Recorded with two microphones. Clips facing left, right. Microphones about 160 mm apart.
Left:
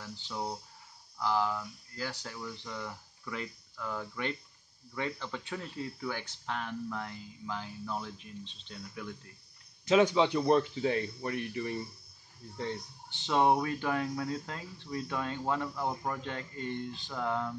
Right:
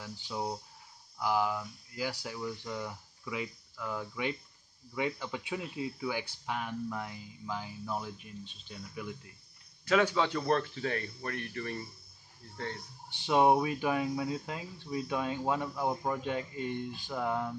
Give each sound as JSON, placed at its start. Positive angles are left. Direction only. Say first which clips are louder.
{"t": 0.0, "sound": "speech", "louder": "right 1 dB", "side_deg": -5}
{"t": 9.8, "sound": "speech", "louder": "left 3 dB", "side_deg": 20}
{"t": 13.1, "sound": "speech", "louder": "right 2 dB", "side_deg": -10}